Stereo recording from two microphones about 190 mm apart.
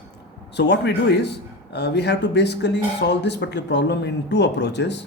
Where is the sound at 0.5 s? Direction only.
65° left (ahead or behind).